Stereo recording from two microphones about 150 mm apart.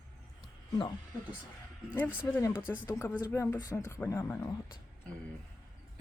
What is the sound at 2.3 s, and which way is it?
Speech, 15° left (ahead or behind).